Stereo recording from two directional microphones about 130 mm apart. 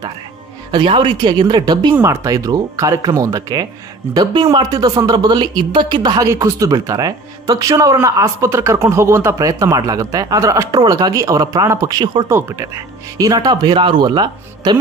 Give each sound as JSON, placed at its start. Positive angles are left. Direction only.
{"t": 0.7, "sound": "speech", "side_deg": -40}
{"t": 12.3, "sound": "speech", "side_deg": -20}